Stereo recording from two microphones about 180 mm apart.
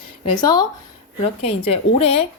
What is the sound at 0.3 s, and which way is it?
A woman's voice, 25° left (ahead or behind).